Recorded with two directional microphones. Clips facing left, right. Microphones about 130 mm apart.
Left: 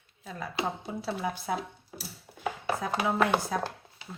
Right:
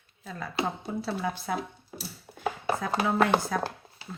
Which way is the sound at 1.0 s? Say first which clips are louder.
Left 1 dB; 10° left (ahead or behind).